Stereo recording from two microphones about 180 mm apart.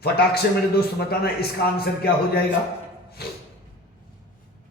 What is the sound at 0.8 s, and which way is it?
A man's voice, 60° left (ahead or behind).